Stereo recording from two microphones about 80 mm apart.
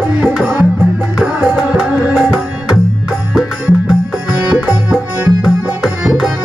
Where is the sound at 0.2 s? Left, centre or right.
Centre.